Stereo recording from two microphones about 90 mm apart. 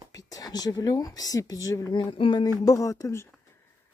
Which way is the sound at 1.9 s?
65° left (ahead or behind).